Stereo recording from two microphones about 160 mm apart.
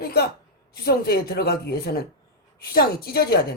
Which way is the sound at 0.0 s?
75° left (ahead or behind).